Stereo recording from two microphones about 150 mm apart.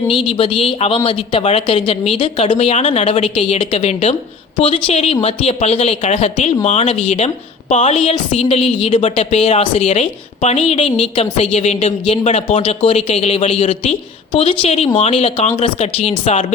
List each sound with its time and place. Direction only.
0.3 s a woman's voice: 35° left (ahead or behind)